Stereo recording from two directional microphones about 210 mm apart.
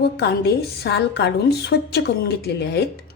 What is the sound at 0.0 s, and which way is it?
A woman's voice, 50° left (ahead or behind).